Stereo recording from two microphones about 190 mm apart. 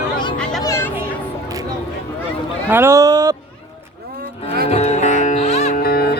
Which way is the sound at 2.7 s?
15° right (ahead or behind).